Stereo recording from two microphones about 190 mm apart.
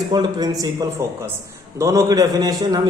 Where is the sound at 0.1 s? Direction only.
20° right (ahead or behind).